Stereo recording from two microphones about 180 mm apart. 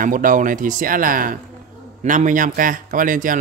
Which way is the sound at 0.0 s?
50° right (ahead or behind).